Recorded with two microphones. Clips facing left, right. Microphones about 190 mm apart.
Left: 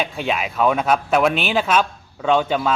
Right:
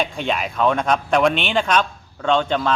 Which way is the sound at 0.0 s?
5° left (ahead or behind).